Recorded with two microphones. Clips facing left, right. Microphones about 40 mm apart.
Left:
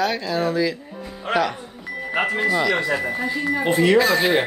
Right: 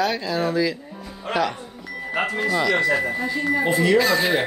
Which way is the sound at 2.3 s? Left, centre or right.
Centre.